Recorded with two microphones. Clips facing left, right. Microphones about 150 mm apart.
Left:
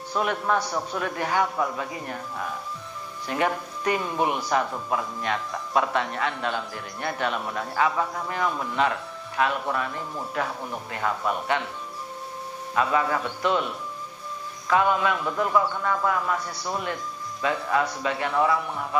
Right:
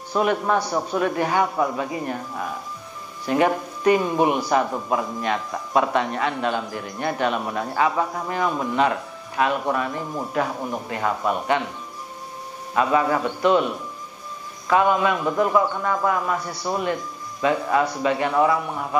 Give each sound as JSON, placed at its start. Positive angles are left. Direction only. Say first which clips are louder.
{"t": 0.2, "sound": "speech", "louder": "right 4 dB", "side_deg": -20}
{"t": 0.6, "sound": "a man's voice", "louder": "right 5 dB", "side_deg": -35}
{"t": 11.5, "sound": "a man's voice", "louder": "right 4 dB", "side_deg": -10}
{"t": 12.7, "sound": "speech", "louder": "right 4 dB", "side_deg": -20}
{"t": 14.7, "sound": "speech", "louder": "right 3 dB", "side_deg": -20}
{"t": 15.1, "sound": "a man's voice", "louder": "right 4 dB", "side_deg": -30}